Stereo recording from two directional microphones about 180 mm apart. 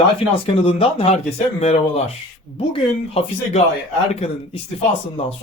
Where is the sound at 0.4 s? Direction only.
30° left (ahead or behind).